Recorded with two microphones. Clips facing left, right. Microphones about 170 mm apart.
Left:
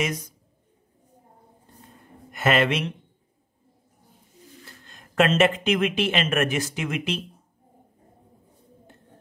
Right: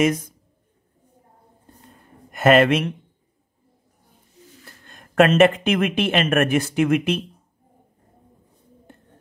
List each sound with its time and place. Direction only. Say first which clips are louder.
0.0 s speech: right 8 dB; 50° right (ahead or behind)
2.3 s speech: right 7 dB; 50° right (ahead or behind)
4.8 s speech: right 5 dB; 55° right (ahead or behind)